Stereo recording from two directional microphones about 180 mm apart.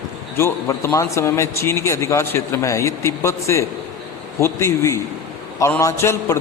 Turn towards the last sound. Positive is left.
turn(degrees=15)  # may be behind; listen again after turning